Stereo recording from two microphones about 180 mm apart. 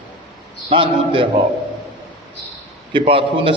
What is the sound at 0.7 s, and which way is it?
Speech, 30° right (ahead or behind).